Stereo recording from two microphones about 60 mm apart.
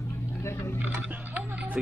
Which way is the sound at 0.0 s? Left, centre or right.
Left.